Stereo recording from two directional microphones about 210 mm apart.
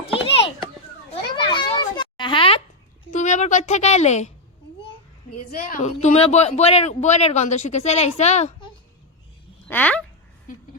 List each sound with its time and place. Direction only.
0.0 s children playing: 30° left (ahead or behind)
3.2 s a sound: 35° left (ahead or behind)
5.5 s speech: 40° left (ahead or behind)
9.6 s speech: 10° left (ahead or behind)